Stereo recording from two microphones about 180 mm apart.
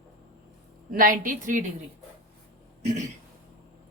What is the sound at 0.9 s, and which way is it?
Speech, 50° right (ahead or behind).